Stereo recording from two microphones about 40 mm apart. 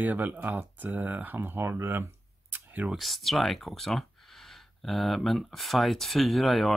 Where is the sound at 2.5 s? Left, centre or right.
Right.